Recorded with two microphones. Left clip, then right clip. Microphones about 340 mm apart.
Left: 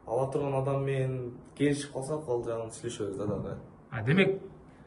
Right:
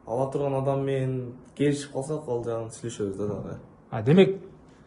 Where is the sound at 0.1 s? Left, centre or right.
Right.